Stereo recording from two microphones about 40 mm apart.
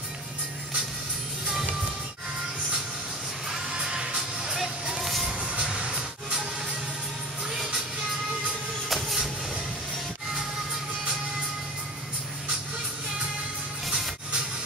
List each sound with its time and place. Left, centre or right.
3.4 s music: centre
8.8 s music: centre
13.8 s music: centre